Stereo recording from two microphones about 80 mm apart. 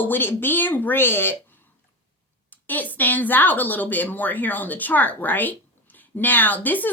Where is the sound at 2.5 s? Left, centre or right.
Left.